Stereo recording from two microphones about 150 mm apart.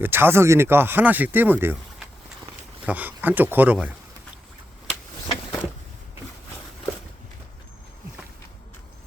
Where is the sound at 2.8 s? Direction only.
10° right (ahead or behind).